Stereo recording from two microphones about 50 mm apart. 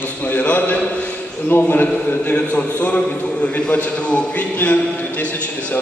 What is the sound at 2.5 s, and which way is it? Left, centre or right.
A man's voice, left.